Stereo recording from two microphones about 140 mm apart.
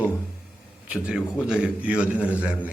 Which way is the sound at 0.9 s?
5° right (ahead or behind).